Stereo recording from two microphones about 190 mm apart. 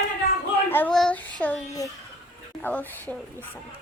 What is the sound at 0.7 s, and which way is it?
Babbling, 5° left (ahead or behind).